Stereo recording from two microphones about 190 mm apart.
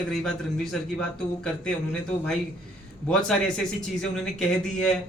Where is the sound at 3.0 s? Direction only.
5° left (ahead or behind).